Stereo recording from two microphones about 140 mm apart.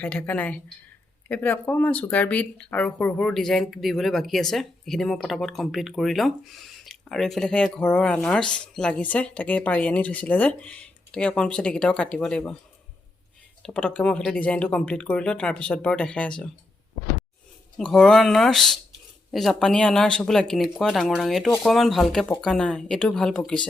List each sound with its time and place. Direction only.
0.0 s speech: 10° left (ahead or behind)
13.6 s speech: 5° left (ahead or behind)
17.7 s speech: 5° left (ahead or behind)